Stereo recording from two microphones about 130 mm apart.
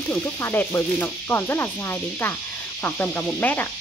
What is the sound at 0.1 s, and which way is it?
Speech, 15° left (ahead or behind).